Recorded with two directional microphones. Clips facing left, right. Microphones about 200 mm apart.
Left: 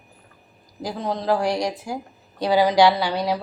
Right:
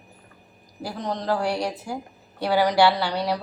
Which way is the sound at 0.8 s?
10° left (ahead or behind).